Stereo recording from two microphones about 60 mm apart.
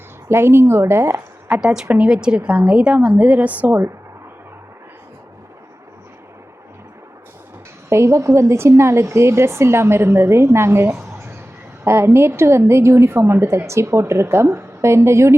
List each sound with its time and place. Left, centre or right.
0.3 s a woman's voice: right
1.6 s a woman's voice: centre
7.9 s a woman's voice: right